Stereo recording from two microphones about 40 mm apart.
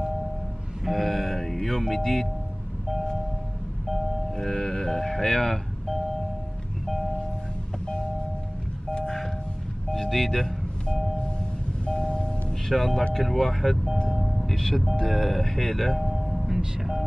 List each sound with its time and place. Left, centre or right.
0.8 s music: centre
3.9 s music: centre
7.8 s a sound: left
8.9 s vehicle: centre
9.9 s speech: centre
11.8 s music: left
12.6 s speech: centre
14.2 s a sound: centre
15.0 s speech: centre
16.1 s music: centre